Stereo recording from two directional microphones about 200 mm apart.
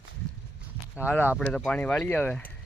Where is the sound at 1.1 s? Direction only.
10° left (ahead or behind).